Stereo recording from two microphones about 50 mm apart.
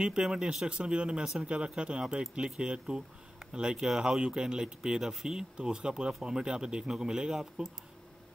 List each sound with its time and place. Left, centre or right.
0.0 s speech: centre